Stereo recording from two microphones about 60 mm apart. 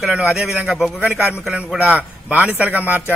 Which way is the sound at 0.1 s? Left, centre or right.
Centre.